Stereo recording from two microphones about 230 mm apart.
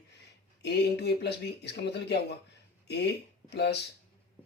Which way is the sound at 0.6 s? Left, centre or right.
Left.